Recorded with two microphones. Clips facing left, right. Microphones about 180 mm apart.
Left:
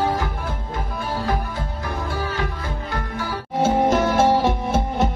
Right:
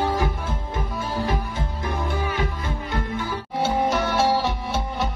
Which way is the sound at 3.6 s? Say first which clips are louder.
Left 4 dB; 45° left (ahead or behind).